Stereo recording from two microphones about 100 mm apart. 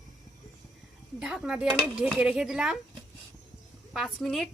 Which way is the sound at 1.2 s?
5° right (ahead or behind).